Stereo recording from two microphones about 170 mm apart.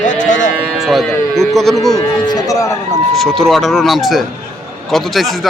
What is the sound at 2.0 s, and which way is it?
Speech, 25° left (ahead or behind).